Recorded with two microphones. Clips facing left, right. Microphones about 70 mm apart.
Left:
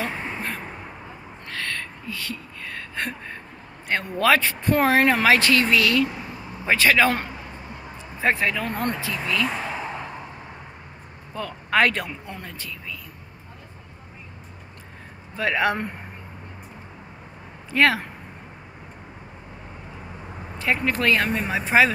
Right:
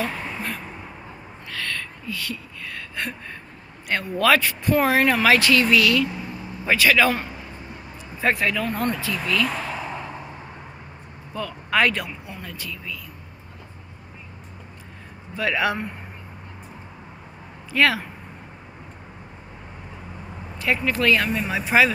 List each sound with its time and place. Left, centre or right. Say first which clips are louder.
0.0 s a sound: right 1 dB; left
3.9 s speech: right 1 dB; left
8.2 s speech: even; left
8.6 s speech: right 2 dB; left
8.9 s speech: right 2 dB; left
11.3 s speech: left 1 dB; left
15.3 s speech: left 1 dB; left
17.6 s speech: left 1 dB; left
20.5 s speech: even; left